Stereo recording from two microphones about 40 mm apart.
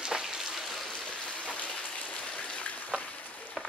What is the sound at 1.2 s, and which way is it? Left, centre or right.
Rain, left.